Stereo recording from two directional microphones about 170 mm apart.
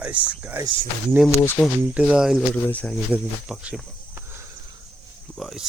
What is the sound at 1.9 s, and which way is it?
Speech, 10° right (ahead or behind).